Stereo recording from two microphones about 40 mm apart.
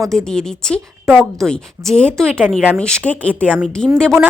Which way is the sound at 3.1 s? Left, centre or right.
Left.